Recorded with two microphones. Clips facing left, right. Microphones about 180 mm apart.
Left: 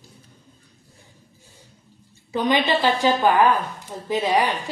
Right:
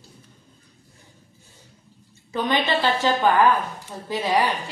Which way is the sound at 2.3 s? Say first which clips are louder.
Left 2 dB; 15° left (ahead or behind).